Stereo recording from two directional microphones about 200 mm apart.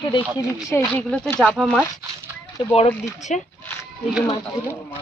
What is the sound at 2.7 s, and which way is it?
Speech, 30° left (ahead or behind).